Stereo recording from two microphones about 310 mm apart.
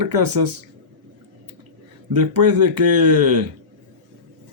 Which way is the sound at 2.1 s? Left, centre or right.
Right.